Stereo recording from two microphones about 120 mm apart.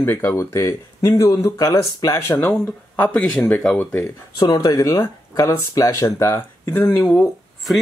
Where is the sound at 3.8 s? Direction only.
20° left (ahead or behind).